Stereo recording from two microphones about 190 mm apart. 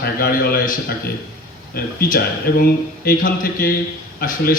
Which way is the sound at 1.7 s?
50° left (ahead or behind).